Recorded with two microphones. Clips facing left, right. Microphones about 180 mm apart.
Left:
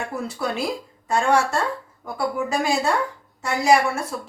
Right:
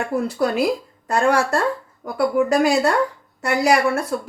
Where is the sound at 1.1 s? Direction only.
60° right (ahead or behind).